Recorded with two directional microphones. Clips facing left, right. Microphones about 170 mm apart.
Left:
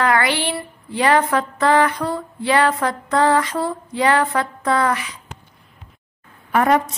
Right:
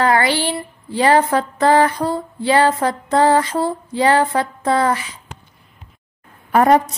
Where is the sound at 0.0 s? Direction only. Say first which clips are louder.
Right 2 dB; 30° right (ahead or behind).